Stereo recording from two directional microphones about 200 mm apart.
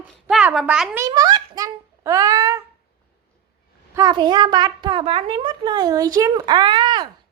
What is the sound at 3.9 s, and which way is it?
A child's voice, 20° right (ahead or behind).